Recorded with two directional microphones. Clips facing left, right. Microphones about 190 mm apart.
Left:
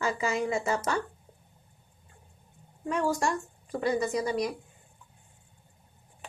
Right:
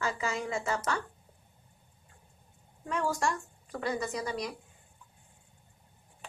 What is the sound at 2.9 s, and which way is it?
Speech, 20° left (ahead or behind).